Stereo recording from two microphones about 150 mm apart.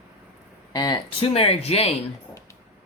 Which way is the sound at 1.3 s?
40° left (ahead or behind).